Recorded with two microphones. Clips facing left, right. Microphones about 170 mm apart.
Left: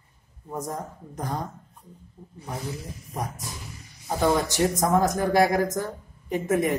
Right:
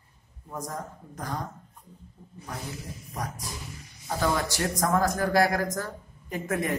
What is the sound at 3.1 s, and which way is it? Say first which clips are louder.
A man's voice: left 3 dB; 25° left (ahead or behind).